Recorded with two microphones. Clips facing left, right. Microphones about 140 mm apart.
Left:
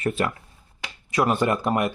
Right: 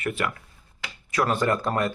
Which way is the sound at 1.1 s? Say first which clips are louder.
Left 2 dB; 20° left (ahead or behind).